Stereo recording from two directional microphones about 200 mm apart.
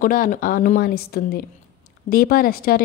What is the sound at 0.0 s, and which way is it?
Speech, 45° left (ahead or behind).